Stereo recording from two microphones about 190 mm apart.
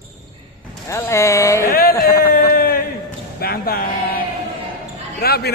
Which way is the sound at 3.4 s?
55° left (ahead or behind).